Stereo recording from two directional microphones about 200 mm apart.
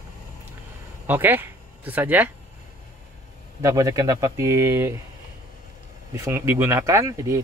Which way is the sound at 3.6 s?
15° right (ahead or behind).